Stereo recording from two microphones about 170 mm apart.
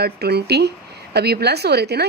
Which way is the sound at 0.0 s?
70° right (ahead or behind).